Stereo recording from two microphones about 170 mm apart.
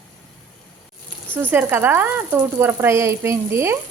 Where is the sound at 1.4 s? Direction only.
10° right (ahead or behind).